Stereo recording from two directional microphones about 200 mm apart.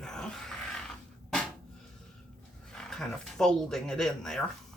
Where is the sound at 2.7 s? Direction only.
Centre (ahead or behind).